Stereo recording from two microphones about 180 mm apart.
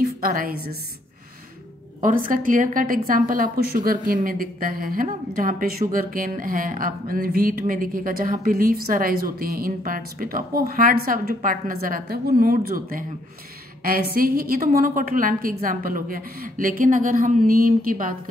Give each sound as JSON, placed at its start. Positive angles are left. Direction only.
{"t": 0.2, "sound": "a woman's voice", "side_deg": -55}
{"t": 2.0, "sound": "a woman's voice", "side_deg": -50}
{"t": 14.1, "sound": "a woman's voice", "side_deg": -55}